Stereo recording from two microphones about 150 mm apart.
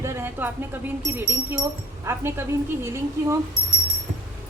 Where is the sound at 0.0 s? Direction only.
15° right (ahead or behind).